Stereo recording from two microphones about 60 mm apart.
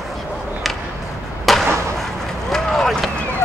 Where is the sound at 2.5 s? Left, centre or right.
Centre.